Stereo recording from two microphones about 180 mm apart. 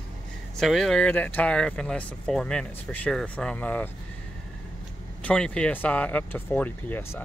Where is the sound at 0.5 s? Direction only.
Centre (ahead or behind).